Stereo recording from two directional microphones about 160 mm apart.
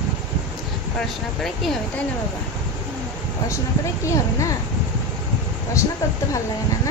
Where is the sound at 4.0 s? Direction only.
20° left (ahead or behind).